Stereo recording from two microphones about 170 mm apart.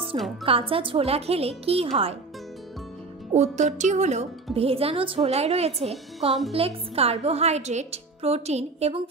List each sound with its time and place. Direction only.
0.1 s a woman's voice: 30° right (ahead or behind)
3.3 s a woman's voice: 45° right (ahead or behind)